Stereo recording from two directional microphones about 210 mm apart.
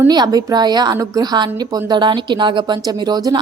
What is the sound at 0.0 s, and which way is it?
A woman's voice, 20° right (ahead or behind).